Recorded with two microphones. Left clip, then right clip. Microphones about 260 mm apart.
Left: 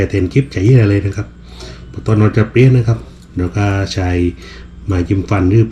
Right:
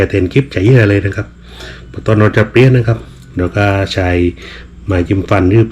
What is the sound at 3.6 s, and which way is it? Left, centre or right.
Speech, right.